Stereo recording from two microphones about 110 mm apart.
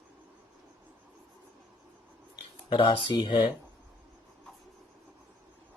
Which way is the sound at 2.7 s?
45° left (ahead or behind).